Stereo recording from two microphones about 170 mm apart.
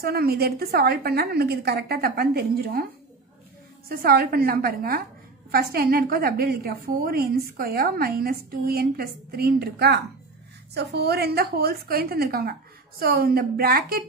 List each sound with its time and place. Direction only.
0.0 s a woman's voice: 65° right (ahead or behind)
3.9 s a woman's voice: 60° right (ahead or behind)